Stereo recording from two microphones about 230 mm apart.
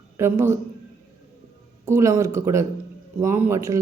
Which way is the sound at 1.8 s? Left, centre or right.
Centre.